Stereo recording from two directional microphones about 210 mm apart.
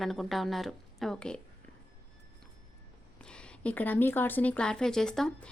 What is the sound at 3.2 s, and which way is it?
A woman's voice, 5° left (ahead or behind).